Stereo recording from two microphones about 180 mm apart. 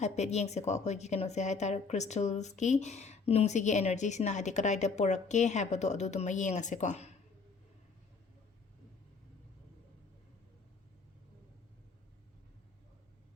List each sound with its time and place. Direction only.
0.0 s speech: 40° left (ahead or behind)